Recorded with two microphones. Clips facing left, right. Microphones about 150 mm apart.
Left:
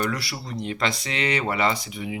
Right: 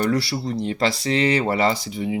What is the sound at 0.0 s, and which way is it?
Speech, 30° right (ahead or behind).